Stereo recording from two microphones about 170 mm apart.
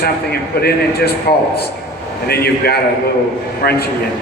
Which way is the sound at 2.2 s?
65° left (ahead or behind).